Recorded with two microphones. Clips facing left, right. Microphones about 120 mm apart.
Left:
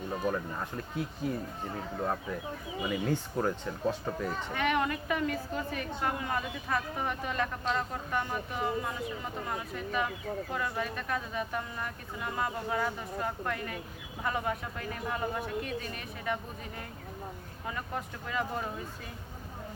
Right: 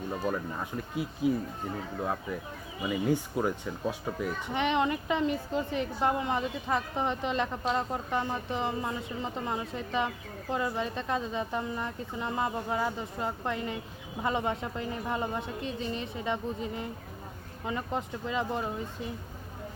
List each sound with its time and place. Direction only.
0.1 s speech: 5° right (ahead or behind)
2.8 s speech: 5° right (ahead or behind)
4.5 s a woman's voice: 20° right (ahead or behind)